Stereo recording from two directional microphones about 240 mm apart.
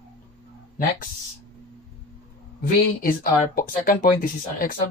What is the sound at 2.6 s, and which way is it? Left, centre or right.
Speech, left.